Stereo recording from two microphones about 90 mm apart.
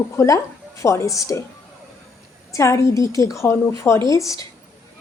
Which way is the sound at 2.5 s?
35° left (ahead or behind).